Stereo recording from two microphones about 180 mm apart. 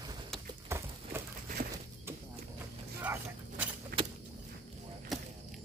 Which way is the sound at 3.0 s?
10° right (ahead or behind).